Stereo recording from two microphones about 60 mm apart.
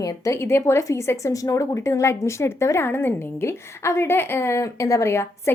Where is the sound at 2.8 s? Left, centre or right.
Left.